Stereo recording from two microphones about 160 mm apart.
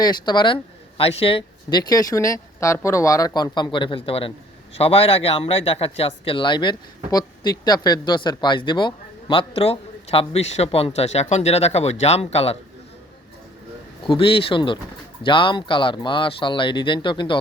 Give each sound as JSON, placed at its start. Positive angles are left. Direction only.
{"t": 0.0, "sound": "speech", "side_deg": 25}
{"t": 14.1, "sound": "speech", "side_deg": 35}